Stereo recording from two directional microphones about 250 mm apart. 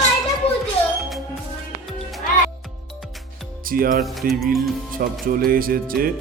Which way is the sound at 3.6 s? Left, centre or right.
Right.